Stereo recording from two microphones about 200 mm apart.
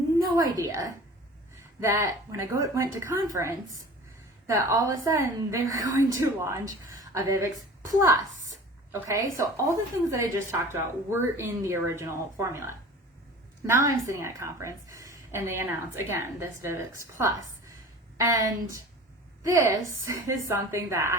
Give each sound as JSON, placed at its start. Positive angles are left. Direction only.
{"t": 0.5, "sound": "a woman's voice", "side_deg": -15}